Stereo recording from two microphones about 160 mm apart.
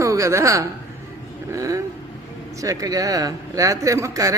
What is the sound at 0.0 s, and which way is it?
Speech, 20° right (ahead or behind).